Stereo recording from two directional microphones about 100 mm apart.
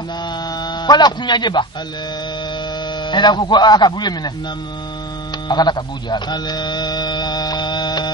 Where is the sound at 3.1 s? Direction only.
45° left (ahead or behind).